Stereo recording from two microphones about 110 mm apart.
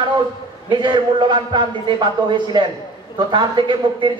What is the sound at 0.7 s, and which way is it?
A man's voice, 45° right (ahead or behind).